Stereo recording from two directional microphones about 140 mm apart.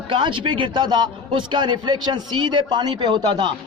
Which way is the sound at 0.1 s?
35° right (ahead or behind).